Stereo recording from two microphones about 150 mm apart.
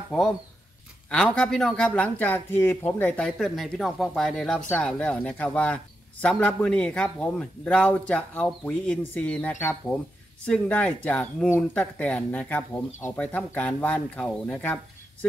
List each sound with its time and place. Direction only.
1.1 s a man's voice: 5° left (ahead or behind)